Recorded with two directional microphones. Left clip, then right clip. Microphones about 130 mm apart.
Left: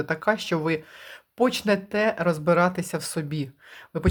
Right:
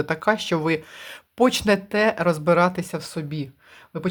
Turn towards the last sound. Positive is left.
turn(degrees=10)  # may be behind; listen again after turning